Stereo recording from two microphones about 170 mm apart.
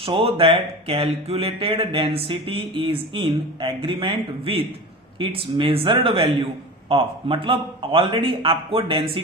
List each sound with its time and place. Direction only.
0.0 s a man's voice: 35° right (ahead or behind)